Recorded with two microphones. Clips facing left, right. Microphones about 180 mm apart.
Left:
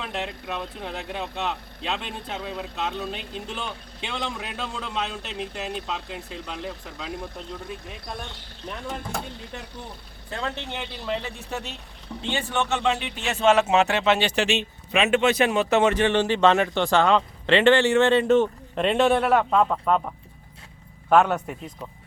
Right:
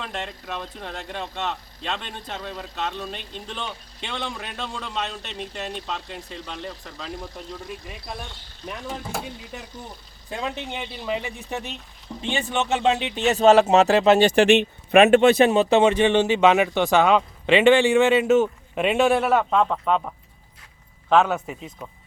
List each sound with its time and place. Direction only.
0.0 s speech: centre (ahead or behind)
8.9 s speech: 5° right (ahead or behind)
13.1 s a man's voice: 40° right (ahead or behind)
15.2 s speech: 30° right (ahead or behind); by 20.1 s centre (ahead or behind)
21.2 s speech: 5° right (ahead or behind)